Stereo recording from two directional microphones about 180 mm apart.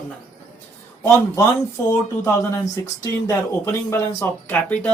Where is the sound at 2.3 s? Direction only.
15° left (ahead or behind).